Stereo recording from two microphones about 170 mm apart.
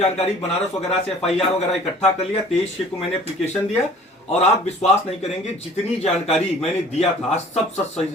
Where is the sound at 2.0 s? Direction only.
40° left (ahead or behind).